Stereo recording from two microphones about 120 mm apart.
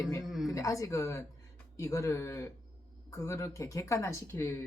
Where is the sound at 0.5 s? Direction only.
25° left (ahead or behind).